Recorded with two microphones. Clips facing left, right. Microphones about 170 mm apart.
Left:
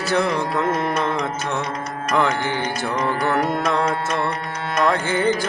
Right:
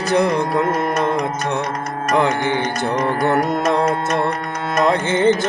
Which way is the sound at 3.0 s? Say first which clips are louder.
Right 3 dB; 45° right (ahead or behind).